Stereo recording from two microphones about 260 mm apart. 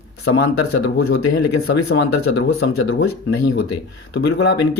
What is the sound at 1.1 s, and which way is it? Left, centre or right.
Speech, left.